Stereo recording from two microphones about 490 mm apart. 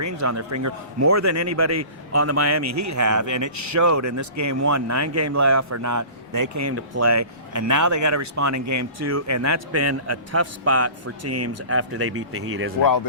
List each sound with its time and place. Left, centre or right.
0.0 s a man's voice: right